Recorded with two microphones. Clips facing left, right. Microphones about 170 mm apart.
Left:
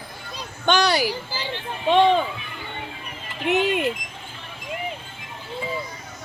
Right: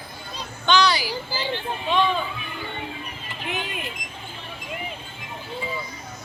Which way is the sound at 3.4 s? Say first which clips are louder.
Left 11 dB; 75° left (ahead or behind).